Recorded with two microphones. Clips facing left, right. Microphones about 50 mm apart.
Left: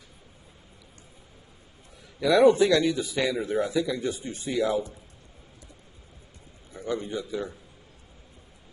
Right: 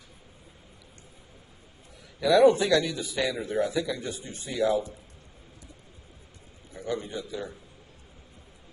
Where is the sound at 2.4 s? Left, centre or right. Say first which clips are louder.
Left 2 dB; left.